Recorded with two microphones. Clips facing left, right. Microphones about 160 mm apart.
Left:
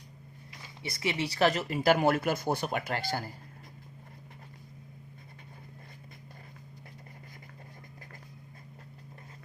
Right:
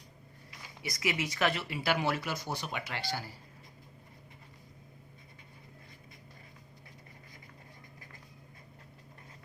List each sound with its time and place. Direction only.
0.8 s speech: 30° left (ahead or behind); by 3.3 s 50° left (ahead or behind)